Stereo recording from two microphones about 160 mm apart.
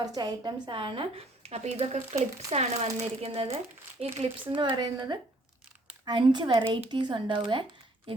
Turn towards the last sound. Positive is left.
turn(degrees=-30)  # may be behind; listen again after turning